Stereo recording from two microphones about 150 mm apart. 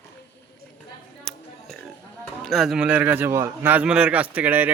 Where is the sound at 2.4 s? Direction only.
Centre (ahead or behind).